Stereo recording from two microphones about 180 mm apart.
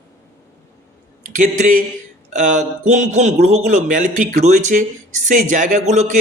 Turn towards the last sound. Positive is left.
turn(degrees=-40)  # may be behind; listen again after turning